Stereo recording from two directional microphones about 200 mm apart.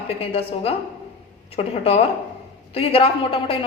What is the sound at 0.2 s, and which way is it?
A woman's voice, 30° left (ahead or behind).